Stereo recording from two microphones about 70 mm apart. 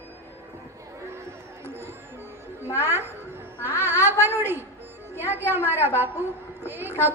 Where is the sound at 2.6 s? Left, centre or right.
Left.